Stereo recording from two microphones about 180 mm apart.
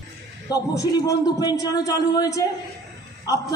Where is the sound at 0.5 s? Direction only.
20° left (ahead or behind).